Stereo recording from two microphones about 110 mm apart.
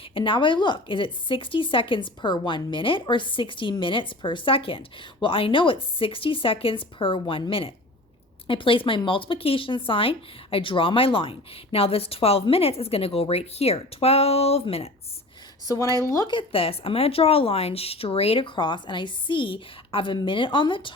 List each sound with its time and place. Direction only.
0.1 s speech: 50° left (ahead or behind)
8.4 s speech: 55° left (ahead or behind)
15.6 s speech: 35° left (ahead or behind)
16.3 s speech: 55° left (ahead or behind)